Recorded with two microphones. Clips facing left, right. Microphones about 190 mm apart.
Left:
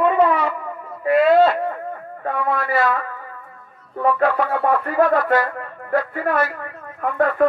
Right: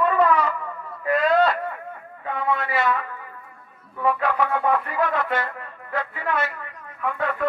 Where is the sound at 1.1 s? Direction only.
5° left (ahead or behind).